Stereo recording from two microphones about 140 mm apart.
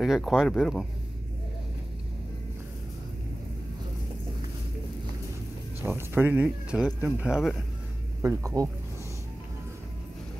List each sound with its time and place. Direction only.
0.0 s speech: centre (ahead or behind)
5.8 s speech: 15° right (ahead or behind)
8.2 s speech: 20° right (ahead or behind)